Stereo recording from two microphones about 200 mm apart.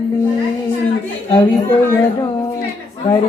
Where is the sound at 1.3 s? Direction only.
25° left (ahead or behind).